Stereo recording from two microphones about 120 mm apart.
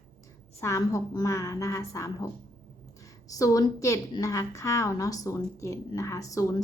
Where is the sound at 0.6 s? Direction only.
25° left (ahead or behind).